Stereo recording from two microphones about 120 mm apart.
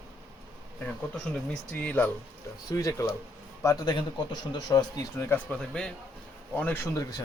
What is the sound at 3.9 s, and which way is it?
A man's voice, 40° left (ahead or behind).